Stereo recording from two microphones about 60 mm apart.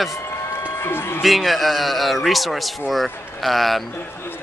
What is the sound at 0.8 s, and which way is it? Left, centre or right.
Speech, left.